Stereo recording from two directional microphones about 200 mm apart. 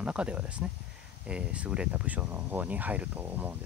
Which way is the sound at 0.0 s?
5° right (ahead or behind).